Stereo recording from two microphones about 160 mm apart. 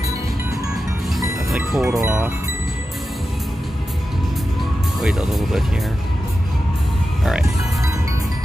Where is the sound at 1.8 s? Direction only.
15° right (ahead or behind).